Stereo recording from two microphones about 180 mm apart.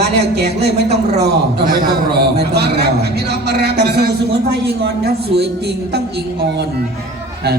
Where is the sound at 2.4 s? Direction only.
65° right (ahead or behind).